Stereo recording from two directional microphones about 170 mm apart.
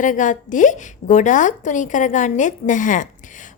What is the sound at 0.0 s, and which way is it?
A woman's voice, 50° left (ahead or behind).